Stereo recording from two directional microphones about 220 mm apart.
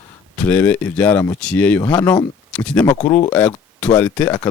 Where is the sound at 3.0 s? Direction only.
20° left (ahead or behind).